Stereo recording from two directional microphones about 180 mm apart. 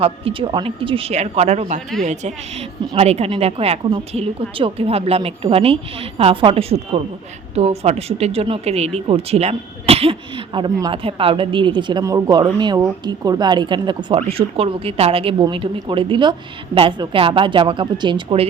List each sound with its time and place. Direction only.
0.0 s a woman's voice: 30° right (ahead or behind)